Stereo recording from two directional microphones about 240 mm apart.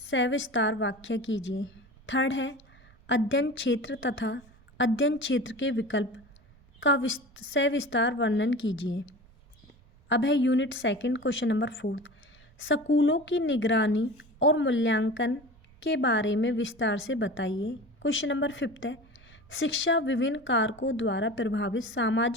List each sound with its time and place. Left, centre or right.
0.1 s a woman's voice: left
10.1 s a woman's voice: left